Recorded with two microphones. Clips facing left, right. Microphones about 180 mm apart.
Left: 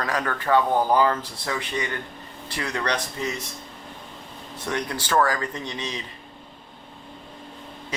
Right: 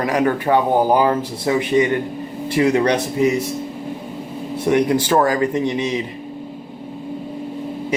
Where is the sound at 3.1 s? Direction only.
10° right (ahead or behind).